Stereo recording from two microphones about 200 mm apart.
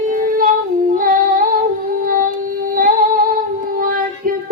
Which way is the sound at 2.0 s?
45° right (ahead or behind).